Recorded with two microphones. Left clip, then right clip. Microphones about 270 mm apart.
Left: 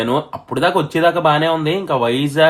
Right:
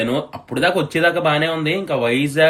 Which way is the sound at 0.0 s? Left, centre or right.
Centre.